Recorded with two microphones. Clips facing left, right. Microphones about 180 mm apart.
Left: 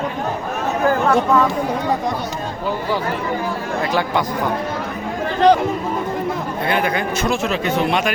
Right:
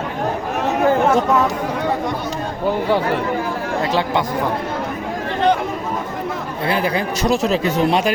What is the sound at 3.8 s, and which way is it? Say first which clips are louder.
Speech: even; 25° right (ahead or behind).